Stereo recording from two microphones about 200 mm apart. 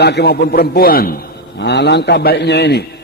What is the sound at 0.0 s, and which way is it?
A man's voice, 55° left (ahead or behind).